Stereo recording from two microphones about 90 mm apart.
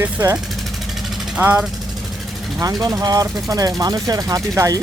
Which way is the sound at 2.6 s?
40° right (ahead or behind).